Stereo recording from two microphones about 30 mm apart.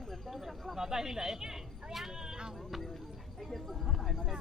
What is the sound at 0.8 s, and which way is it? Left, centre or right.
Speech, centre.